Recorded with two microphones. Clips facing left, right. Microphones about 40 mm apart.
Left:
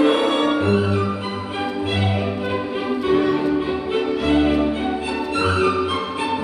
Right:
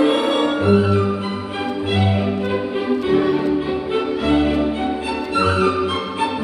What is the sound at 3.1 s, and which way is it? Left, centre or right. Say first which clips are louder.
Music: even; centre.